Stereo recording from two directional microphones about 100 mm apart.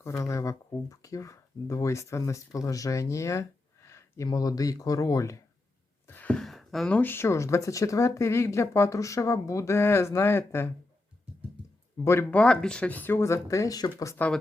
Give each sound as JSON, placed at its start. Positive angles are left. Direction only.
{"t": 0.0, "sound": "speech", "side_deg": 30}
{"t": 6.1, "sound": "a sound", "side_deg": 15}
{"t": 6.4, "sound": "a sound", "side_deg": 0}
{"t": 6.9, "sound": "speech", "side_deg": 20}
{"t": 12.3, "sound": "speech", "side_deg": 10}
{"t": 14.2, "sound": "speech", "side_deg": 15}